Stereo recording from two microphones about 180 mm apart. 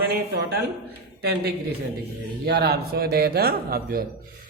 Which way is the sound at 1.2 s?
65° right (ahead or behind).